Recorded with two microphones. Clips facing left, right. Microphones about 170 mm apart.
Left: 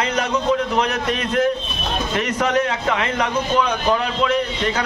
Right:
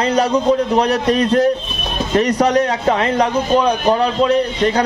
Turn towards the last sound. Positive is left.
turn(degrees=-35)  # may be behind; listen again after turning